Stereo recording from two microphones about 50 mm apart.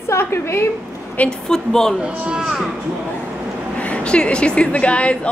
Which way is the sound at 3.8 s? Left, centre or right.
Left.